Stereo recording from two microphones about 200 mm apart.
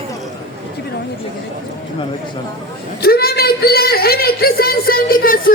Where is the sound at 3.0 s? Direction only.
50° left (ahead or behind).